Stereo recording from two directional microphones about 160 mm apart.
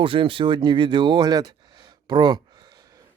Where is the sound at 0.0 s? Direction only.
35° right (ahead or behind).